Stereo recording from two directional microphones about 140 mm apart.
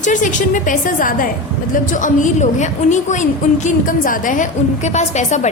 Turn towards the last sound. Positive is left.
turn(degrees=55)  # may be behind; listen again after turning